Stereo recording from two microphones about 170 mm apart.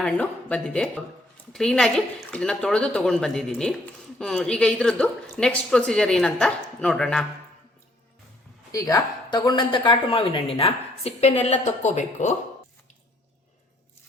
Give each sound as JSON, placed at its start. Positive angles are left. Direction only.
{"t": 0.0, "sound": "a woman's voice", "side_deg": 10}
{"t": 8.7, "sound": "speech", "side_deg": 20}